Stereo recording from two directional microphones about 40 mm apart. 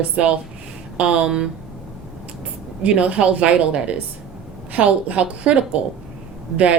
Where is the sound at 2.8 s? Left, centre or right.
Right.